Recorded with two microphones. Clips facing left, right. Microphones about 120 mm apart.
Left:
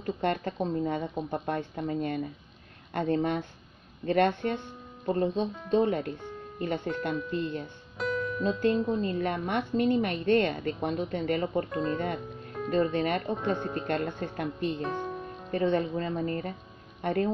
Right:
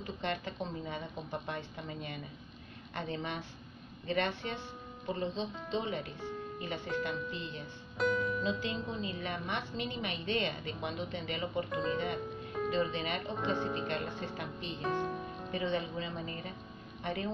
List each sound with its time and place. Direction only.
0.0 s a woman's voice: 50° left (ahead or behind)
8.0 s speech: centre (ahead or behind)
9.0 s a woman's voice: 50° left (ahead or behind)
11.7 s speech: centre (ahead or behind)
12.7 s a woman's voice: 50° left (ahead or behind)
14.8 s music: centre (ahead or behind)
15.5 s a woman's voice: 50° left (ahead or behind)